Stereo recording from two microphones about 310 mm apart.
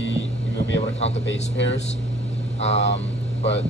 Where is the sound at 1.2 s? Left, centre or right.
Left.